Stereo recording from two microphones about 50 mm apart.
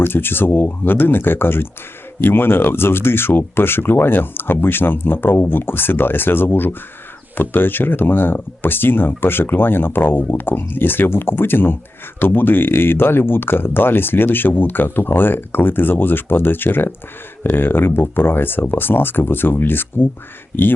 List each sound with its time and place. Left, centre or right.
0.0 s speech: left